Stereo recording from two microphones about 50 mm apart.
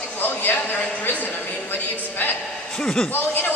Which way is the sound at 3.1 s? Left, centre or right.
Left.